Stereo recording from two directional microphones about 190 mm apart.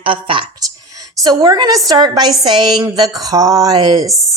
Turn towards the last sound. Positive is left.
turn(degrees=-20)  # may be behind; listen again after turning